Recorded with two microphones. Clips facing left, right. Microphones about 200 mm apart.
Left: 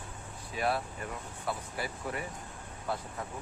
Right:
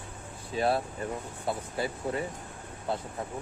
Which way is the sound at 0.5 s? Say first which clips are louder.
Right 4 dB; 30° right (ahead or behind).